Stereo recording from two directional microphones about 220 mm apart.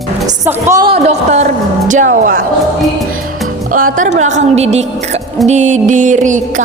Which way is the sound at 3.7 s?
40° right (ahead or behind).